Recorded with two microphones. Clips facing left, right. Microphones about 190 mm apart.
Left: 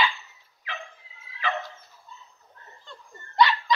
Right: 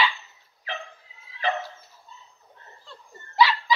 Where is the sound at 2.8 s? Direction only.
5° right (ahead or behind).